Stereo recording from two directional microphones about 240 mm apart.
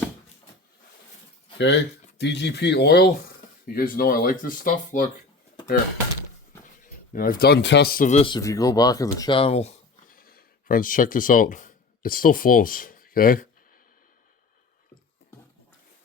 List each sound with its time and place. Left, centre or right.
1.5 s speech: left
7.1 s speech: left